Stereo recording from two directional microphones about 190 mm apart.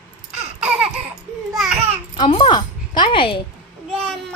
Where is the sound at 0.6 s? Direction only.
5° right (ahead or behind).